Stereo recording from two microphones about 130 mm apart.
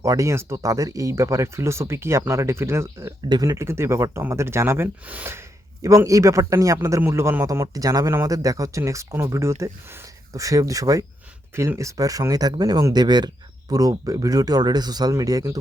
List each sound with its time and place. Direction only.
0.0 s a man's voice: 25° right (ahead or behind)